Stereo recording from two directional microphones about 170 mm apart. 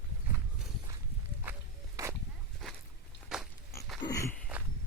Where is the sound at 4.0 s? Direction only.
20° left (ahead or behind).